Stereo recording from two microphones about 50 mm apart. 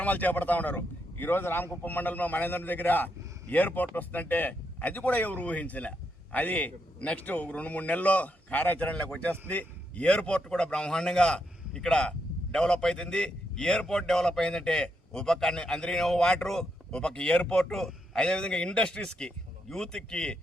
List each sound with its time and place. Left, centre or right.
0.0 s speech: left
1.2 s a man's voice: left
1.8 s a man's voice: left; by 20.4 s centre